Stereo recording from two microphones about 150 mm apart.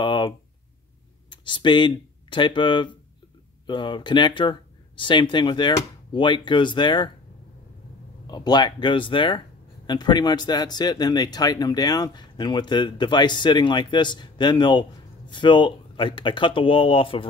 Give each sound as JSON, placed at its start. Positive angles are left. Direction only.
{"t": 0.0, "sound": "a sound", "side_deg": 30}
{"t": 1.3, "sound": "speech", "side_deg": 30}
{"t": 8.3, "sound": "speech", "side_deg": 30}